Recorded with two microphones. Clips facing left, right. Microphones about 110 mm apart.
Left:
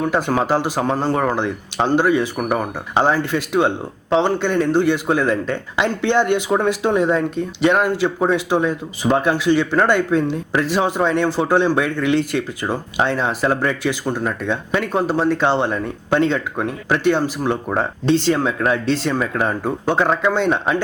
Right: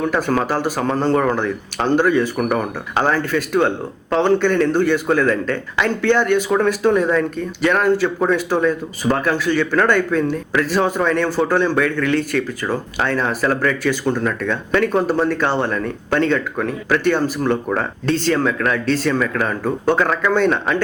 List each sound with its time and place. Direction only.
0.1 s speech: 20° left (ahead or behind)